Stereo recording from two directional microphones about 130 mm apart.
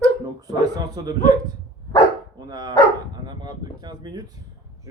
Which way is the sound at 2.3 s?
30° right (ahead or behind).